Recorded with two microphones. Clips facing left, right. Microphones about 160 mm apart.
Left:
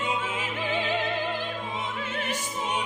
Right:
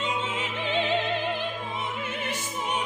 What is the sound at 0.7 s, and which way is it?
Music, 20° right (ahead or behind).